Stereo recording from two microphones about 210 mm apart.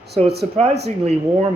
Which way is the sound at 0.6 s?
30° right (ahead or behind).